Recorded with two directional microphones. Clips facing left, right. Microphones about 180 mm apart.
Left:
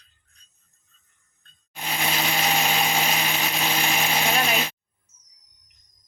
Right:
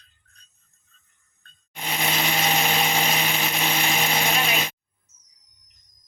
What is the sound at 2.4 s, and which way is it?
Blender, centre (ahead or behind).